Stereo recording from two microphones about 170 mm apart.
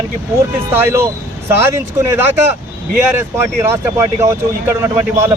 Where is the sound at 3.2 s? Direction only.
15° right (ahead or behind).